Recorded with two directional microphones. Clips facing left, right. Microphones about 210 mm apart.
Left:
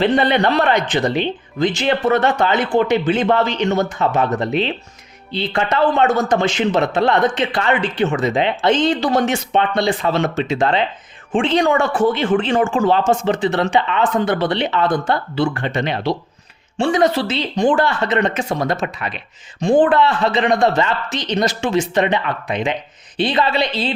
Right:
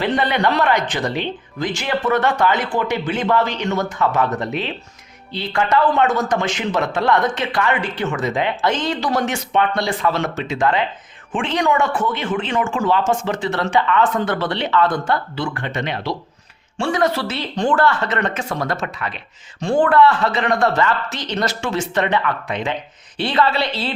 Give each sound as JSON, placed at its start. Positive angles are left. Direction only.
{"t": 0.0, "sound": "a man's voice", "side_deg": 25}
{"t": 16.7, "sound": "speech", "side_deg": 20}